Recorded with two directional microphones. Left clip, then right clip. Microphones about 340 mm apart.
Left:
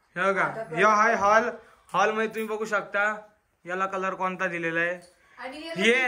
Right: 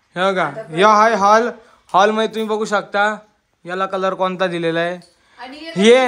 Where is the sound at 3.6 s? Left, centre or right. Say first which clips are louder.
Right 8 dB; centre.